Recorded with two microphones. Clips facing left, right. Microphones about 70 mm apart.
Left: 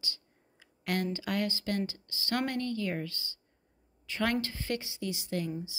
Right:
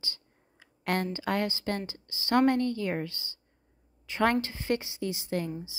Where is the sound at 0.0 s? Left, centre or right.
Right.